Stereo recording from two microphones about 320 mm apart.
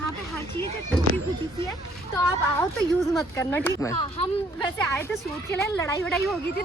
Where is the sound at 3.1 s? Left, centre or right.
Centre.